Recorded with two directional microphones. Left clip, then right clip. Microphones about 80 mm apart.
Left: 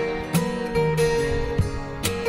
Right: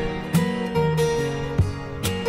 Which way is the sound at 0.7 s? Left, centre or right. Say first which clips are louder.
Left 1 dB; right.